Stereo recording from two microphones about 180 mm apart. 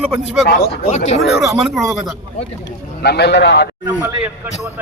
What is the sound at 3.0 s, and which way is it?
Speech, 65° left (ahead or behind).